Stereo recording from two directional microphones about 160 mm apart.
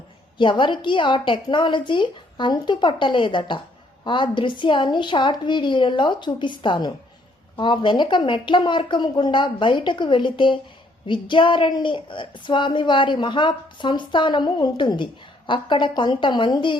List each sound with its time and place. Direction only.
0.3 s a woman's voice: 30° left (ahead or behind)